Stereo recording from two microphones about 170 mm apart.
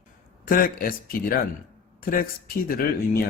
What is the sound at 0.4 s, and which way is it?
Speech, 55° left (ahead or behind).